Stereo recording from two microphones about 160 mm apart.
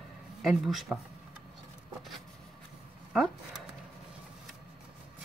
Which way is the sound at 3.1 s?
Centre (ahead or behind).